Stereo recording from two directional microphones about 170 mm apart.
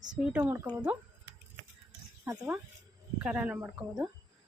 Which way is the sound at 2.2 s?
10° right (ahead or behind).